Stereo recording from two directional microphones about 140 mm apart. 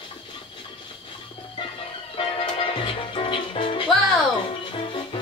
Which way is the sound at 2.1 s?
40° left (ahead or behind).